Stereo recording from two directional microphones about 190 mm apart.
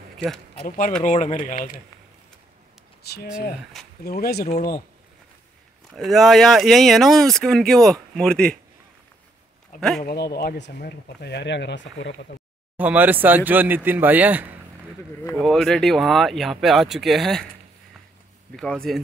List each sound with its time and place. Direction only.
0.7 s speech: 45° left (ahead or behind)
3.0 s a sound: 55° left (ahead or behind)
4.0 s speech: 55° left (ahead or behind)
5.9 s speech: centre (ahead or behind)
9.8 s speech: centre (ahead or behind)
10.0 s speech: 55° left (ahead or behind)
12.7 s speech: 10° right (ahead or behind)
15.3 s speech: centre (ahead or behind)
18.6 s speech: 5° left (ahead or behind)